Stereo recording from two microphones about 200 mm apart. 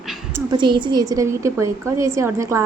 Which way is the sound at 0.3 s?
25° right (ahead or behind).